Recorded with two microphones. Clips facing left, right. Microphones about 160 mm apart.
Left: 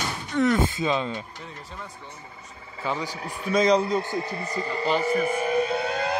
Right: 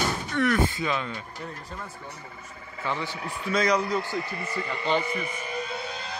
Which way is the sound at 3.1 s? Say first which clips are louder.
Even; 40° left (ahead or behind).